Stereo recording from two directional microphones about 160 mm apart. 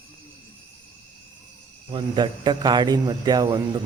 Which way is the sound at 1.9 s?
30° right (ahead or behind).